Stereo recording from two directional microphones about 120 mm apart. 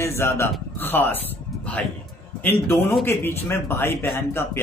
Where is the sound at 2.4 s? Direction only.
20° left (ahead or behind).